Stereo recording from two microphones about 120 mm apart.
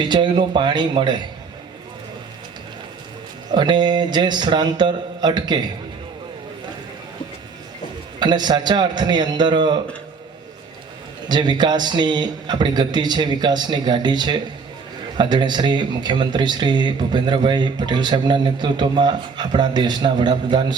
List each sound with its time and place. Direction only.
0.0 s speech: 40° right (ahead or behind)
3.5 s speech: 40° right (ahead or behind)
8.2 s speech: 40° right (ahead or behind)
11.3 s speech: 40° right (ahead or behind)